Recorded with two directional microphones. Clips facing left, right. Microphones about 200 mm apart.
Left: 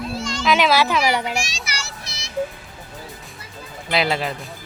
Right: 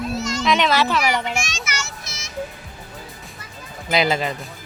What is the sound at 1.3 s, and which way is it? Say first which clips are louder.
Children playing: even; 35° left (ahead or behind).